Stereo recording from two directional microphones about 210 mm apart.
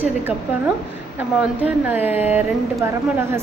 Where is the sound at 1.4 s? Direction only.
5° right (ahead or behind).